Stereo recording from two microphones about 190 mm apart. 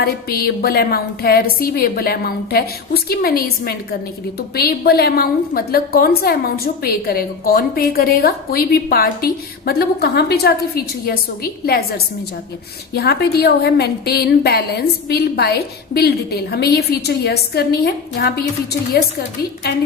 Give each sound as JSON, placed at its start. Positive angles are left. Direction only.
{"t": 0.0, "sound": "a woman's voice", "side_deg": 55}